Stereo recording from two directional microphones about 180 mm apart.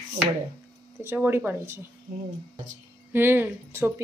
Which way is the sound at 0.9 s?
10° right (ahead or behind).